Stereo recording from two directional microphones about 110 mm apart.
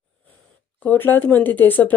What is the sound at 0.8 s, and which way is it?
Speech, 15° left (ahead or behind).